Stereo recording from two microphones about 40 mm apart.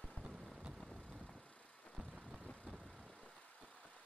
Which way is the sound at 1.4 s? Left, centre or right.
Left.